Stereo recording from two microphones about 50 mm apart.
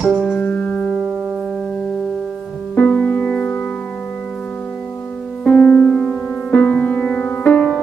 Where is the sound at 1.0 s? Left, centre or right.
Centre.